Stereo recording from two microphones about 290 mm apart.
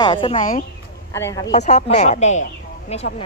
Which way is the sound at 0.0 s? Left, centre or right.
Centre.